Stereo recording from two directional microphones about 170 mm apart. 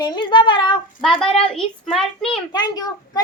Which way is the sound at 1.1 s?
5° left (ahead or behind).